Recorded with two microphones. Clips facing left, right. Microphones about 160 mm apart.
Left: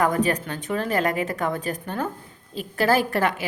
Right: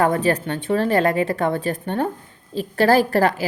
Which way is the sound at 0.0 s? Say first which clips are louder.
Right 3 dB; 30° right (ahead or behind).